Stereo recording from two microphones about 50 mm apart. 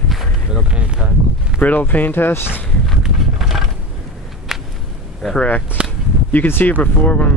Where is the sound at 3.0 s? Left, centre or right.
Centre.